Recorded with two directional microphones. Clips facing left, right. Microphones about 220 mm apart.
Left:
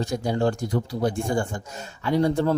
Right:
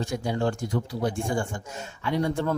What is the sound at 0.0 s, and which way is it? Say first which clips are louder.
Speech: left 3 dB; 40° left (ahead or behind).